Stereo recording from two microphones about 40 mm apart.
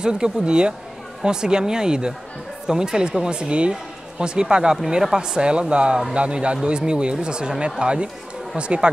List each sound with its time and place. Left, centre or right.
0.0 s speech: right